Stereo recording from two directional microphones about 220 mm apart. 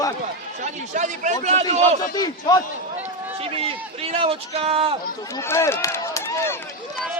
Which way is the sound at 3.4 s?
25° right (ahead or behind).